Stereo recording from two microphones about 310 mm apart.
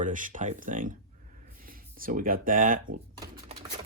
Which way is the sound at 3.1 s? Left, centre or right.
Centre.